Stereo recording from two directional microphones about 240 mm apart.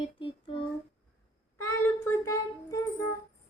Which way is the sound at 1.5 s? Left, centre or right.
Centre.